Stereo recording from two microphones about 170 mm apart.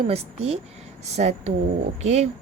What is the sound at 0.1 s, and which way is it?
Speech, 40° right (ahead or behind).